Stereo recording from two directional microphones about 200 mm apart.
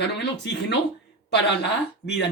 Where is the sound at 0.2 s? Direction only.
55° left (ahead or behind).